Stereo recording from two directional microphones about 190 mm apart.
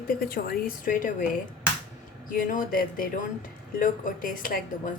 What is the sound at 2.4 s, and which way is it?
Speech, 45° left (ahead or behind).